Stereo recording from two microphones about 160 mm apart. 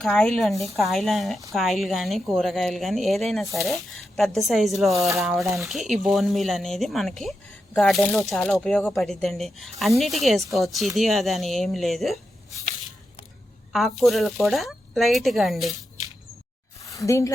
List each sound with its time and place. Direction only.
0.0 s speech: 5° left (ahead or behind)
4.9 s speech: 20° right (ahead or behind)
5.2 s speech: centre (ahead or behind)
13.7 s speech: centre (ahead or behind)
16.8 s speech: 20° left (ahead or behind)